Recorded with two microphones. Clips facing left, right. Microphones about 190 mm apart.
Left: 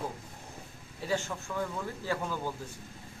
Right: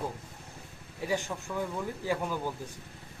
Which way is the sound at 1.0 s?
15° right (ahead or behind).